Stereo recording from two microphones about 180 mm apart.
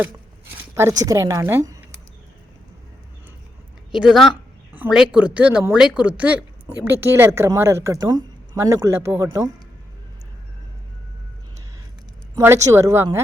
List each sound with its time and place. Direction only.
0.7 s speech: 15° right (ahead or behind)
3.9 s speech: centre (ahead or behind); by 9.5 s 20° right (ahead or behind)
12.4 s speech: 15° right (ahead or behind)